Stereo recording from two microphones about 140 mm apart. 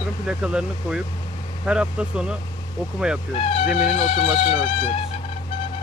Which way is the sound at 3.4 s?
45° left (ahead or behind).